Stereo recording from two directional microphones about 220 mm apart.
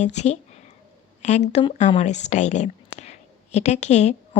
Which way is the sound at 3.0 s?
30° left (ahead or behind).